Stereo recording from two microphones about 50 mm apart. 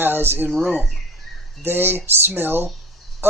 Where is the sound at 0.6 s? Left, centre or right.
Right.